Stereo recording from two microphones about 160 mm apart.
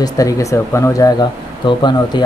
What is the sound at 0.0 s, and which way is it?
Speech, 20° left (ahead or behind).